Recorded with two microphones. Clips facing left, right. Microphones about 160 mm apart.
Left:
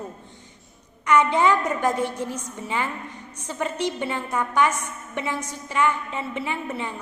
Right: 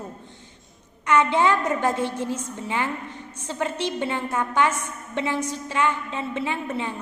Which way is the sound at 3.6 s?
10° left (ahead or behind).